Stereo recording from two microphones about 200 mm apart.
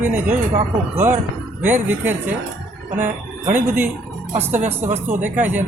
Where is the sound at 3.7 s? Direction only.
10° right (ahead or behind).